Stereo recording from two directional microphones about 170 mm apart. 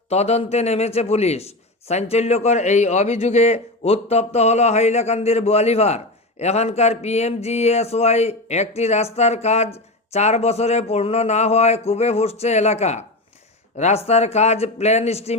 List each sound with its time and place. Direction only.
0.1 s a man's voice: 40° left (ahead or behind)